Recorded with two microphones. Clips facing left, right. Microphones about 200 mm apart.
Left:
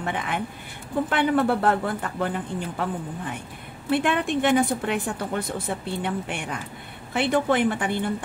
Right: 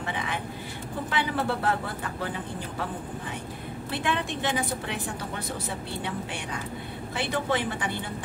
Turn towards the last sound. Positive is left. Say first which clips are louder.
# left 6 dB
turn(degrees=55)  # may be behind; listen again after turning